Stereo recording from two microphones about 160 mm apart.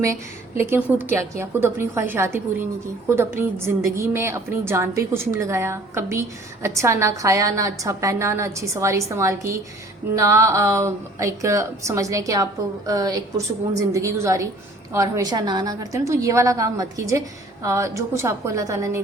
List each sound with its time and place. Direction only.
0.6 s a woman's voice: 10° right (ahead or behind)